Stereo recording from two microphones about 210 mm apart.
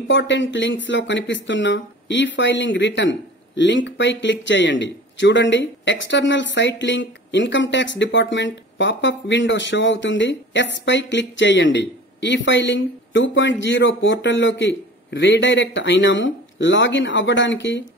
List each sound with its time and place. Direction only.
0.1 s speech: 60° left (ahead or behind)